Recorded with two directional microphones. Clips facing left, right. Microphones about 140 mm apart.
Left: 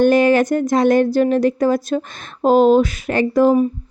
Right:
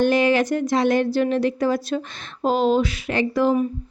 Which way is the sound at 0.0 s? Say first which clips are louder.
Left 5 dB; 50° left (ahead or behind).